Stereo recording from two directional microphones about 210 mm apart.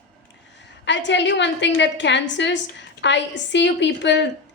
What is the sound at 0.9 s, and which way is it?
A woman's voice, 55° left (ahead or behind).